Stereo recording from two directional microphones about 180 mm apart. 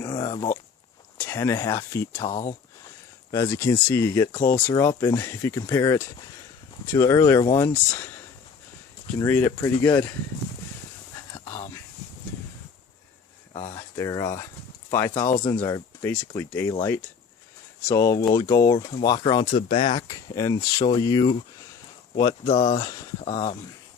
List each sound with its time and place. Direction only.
0.0 s a sound: 20° left (ahead or behind)
1.2 s speech: 15° left (ahead or behind)
3.3 s speech: 15° left (ahead or behind)
9.1 s speech: 10° left (ahead or behind)
13.7 s speech: 15° left (ahead or behind)
17.8 s speech: 20° left (ahead or behind)
20.1 s speech: 20° left (ahead or behind)